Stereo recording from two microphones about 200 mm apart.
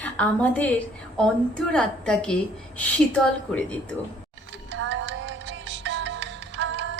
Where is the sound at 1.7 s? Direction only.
5° left (ahead or behind).